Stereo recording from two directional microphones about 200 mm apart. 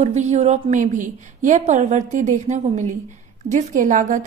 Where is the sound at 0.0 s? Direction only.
35° right (ahead or behind).